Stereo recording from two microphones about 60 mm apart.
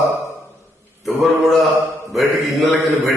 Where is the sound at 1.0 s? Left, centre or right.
Centre.